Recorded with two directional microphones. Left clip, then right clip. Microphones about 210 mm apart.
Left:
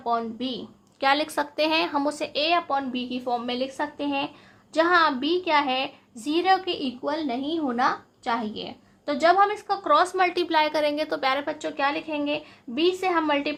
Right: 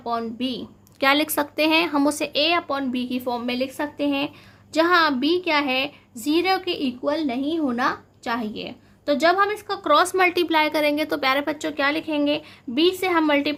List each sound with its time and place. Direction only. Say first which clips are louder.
0.0 s a woman's voice: even; 40° right (ahead or behind)